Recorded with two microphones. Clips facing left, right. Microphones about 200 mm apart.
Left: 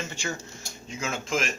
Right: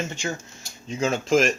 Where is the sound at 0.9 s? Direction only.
35° right (ahead or behind).